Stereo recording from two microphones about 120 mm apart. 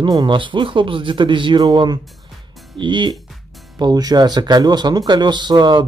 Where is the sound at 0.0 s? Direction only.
40° right (ahead or behind).